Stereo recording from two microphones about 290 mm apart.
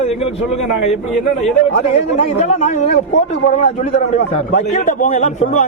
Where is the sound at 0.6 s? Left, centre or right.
Left.